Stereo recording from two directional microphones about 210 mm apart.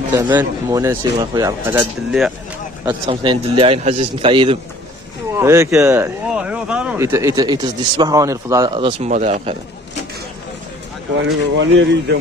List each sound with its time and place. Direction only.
0.1 s speech: 10° right (ahead or behind)
3.1 s a man's voice: 25° right (ahead or behind)
5.4 s speech: 15° right (ahead or behind); by 9.6 s 30° right (ahead or behind)
11.5 s speech: 60° right (ahead or behind)